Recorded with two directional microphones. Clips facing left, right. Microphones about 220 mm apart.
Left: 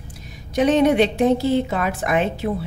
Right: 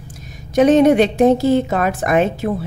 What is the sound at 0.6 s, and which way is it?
A woman's voice, 45° right (ahead or behind).